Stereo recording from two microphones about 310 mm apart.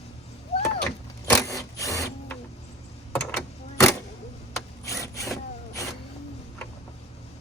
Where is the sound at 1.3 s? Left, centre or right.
Centre.